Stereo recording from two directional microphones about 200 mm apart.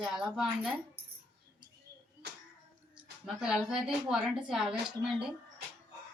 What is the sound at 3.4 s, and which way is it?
A woman's voice, 5° right (ahead or behind).